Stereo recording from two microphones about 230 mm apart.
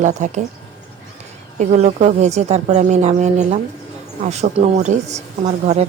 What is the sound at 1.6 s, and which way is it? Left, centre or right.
Speech, right.